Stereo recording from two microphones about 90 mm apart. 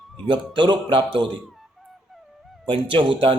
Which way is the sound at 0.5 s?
65° right (ahead or behind).